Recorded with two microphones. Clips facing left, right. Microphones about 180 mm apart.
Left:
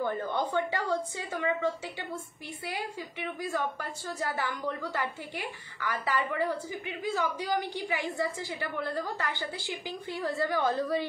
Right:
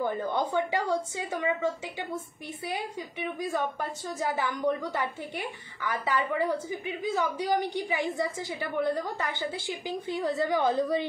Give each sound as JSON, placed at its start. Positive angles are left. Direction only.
{"t": 0.0, "sound": "a woman's voice", "side_deg": -15}
{"t": 3.3, "sound": "a woman's voice", "side_deg": -15}